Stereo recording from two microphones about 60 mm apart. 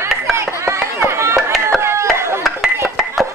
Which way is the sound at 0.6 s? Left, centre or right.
Right.